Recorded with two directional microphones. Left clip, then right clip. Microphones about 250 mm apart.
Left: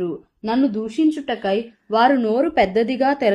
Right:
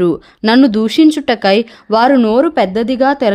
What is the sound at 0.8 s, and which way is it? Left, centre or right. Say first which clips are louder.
A woman's voice: right 10 dB; right.